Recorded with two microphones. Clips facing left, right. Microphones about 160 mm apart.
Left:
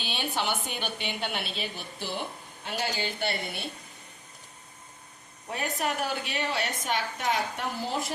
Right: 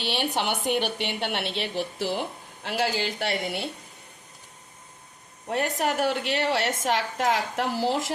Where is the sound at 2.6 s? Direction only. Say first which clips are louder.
Right 5 dB; 90° right.